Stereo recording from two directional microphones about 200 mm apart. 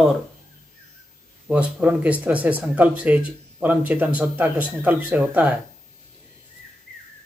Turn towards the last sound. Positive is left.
turn(degrees=-5)  # may be behind; listen again after turning